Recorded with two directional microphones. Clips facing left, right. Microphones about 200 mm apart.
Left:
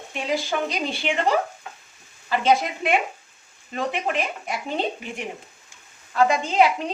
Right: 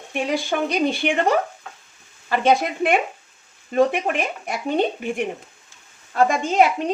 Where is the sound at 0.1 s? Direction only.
55° right (ahead or behind).